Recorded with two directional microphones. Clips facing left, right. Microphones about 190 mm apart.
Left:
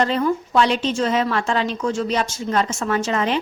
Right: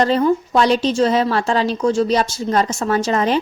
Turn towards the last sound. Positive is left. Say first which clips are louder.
# right 3 dB
turn(degrees=-40)  # may be behind; listen again after turning